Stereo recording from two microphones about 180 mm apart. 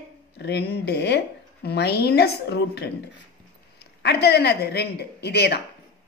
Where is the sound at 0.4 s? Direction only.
65° left (ahead or behind).